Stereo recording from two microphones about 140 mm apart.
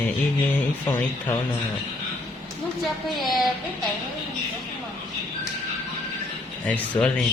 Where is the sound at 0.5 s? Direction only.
15° left (ahead or behind).